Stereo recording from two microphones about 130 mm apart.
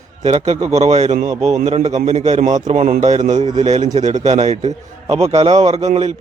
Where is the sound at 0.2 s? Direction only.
55° right (ahead or behind).